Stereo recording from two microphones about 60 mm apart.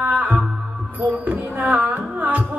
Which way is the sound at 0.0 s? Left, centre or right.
Right.